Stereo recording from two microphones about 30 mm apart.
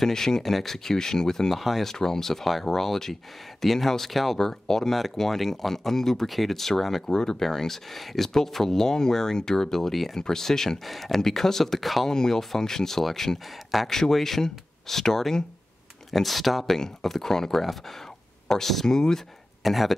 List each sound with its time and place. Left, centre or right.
0.0 s speech: centre
1.5 s speech: centre
2.0 s speech: centre
2.3 s speech: centre
4.4 s speech: centre
10.8 s speech: centre
11.1 s speech: centre
12.1 s speech: left
13.7 s speech: centre
16.6 s speech: centre
17.6 s speech: centre
18.9 s speech: left
19.6 s speech: centre